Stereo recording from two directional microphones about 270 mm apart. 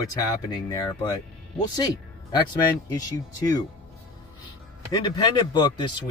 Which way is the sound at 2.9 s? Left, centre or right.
Centre.